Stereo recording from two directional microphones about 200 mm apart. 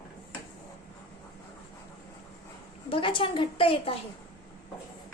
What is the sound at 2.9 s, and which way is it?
A woman's voice, 25° left (ahead or behind).